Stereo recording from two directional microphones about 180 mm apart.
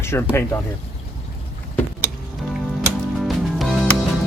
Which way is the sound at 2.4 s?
Centre (ahead or behind).